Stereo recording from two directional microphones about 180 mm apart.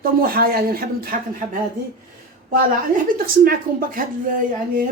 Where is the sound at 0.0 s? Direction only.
55° right (ahead or behind).